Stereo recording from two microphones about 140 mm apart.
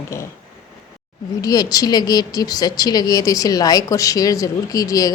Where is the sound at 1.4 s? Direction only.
25° left (ahead or behind).